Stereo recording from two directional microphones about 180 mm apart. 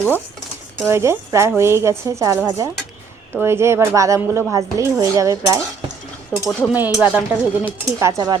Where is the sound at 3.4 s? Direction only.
15° right (ahead or behind).